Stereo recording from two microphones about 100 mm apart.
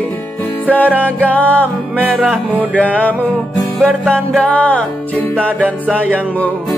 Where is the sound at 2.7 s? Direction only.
15° left (ahead or behind).